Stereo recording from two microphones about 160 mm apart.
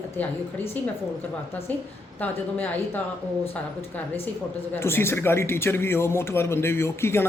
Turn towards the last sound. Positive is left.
turn(degrees=15)  # may be behind; listen again after turning